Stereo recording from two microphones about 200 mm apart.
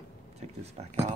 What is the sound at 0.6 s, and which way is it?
Speech, 35° right (ahead or behind).